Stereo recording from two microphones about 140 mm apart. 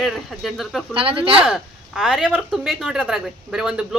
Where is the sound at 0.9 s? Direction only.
40° right (ahead or behind).